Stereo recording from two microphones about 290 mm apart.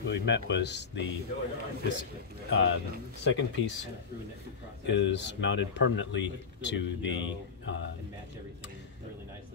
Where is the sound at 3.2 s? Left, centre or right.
Left.